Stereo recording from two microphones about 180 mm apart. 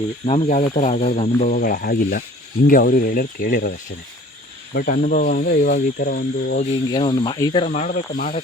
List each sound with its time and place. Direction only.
0.3 s speech: 35° left (ahead or behind); by 3.7 s 50° left (ahead or behind)
4.7 s speech: 55° left (ahead or behind)
6.6 s speech: 30° left (ahead or behind)
7.6 s speech: 40° left (ahead or behind)